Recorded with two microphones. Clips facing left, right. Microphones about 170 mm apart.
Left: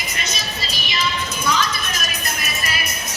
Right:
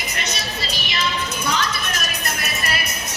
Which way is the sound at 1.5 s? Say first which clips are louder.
Left 3 dB; 65° right (ahead or behind).